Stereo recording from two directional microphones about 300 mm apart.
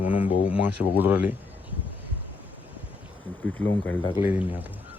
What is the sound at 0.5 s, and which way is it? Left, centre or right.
Speech, centre.